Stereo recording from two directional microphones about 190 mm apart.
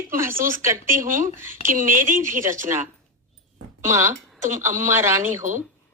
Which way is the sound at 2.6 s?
10° right (ahead or behind).